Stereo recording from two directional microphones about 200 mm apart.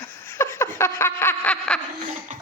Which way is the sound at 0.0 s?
10° left (ahead or behind).